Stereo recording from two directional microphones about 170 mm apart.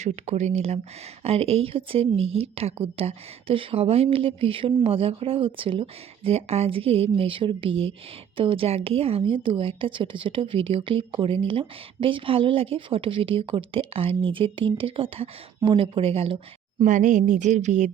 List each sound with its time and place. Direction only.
0.0 s a woman's voice: 40° right (ahead or behind)
16.8 s speech: 50° right (ahead or behind)